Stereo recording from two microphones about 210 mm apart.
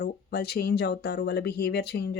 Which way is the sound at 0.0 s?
50° left (ahead or behind).